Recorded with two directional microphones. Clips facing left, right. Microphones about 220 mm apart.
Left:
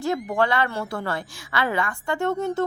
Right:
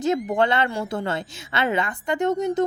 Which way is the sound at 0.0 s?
20° right (ahead or behind).